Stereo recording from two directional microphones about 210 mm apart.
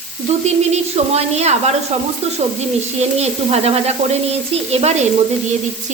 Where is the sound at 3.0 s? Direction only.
30° right (ahead or behind).